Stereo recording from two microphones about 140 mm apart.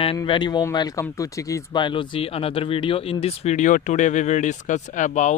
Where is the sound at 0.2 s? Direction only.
30° left (ahead or behind).